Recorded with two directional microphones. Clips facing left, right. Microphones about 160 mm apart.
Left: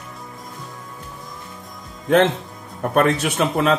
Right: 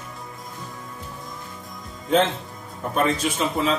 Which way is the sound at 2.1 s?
70° left (ahead or behind).